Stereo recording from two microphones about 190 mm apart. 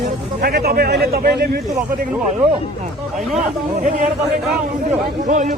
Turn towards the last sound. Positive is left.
turn(degrees=-40)  # may be behind; listen again after turning